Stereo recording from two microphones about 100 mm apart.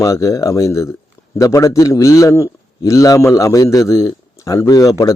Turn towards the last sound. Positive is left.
turn(degrees=35)  # may be behind; listen again after turning